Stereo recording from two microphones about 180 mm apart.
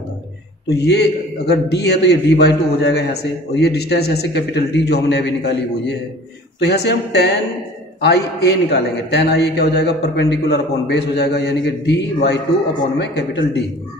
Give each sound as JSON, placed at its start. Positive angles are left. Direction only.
{"t": 0.7, "sound": "a man's voice", "side_deg": 65}